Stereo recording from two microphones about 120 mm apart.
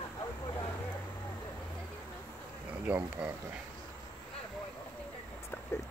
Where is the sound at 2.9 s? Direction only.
15° right (ahead or behind).